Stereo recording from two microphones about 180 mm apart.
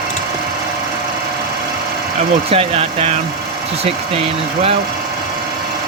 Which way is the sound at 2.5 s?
30° right (ahead or behind).